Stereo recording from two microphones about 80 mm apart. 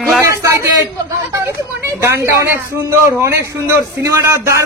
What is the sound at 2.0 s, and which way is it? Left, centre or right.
Speech, right.